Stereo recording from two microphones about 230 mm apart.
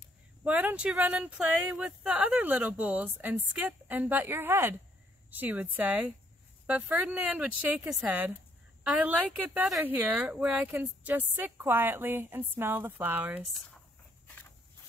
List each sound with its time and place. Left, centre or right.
0.4 s speech: centre